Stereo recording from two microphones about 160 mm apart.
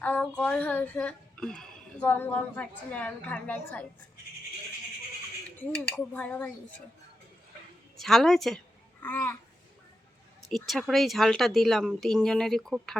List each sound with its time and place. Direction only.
0.0 s speech: 10° left (ahead or behind)
5.5 s speech: 10° left (ahead or behind)
7.9 s a child's voice: centre (ahead or behind)
10.5 s speech: centre (ahead or behind)